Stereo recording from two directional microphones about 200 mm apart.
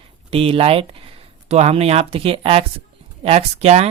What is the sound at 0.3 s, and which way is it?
Speech, 30° right (ahead or behind).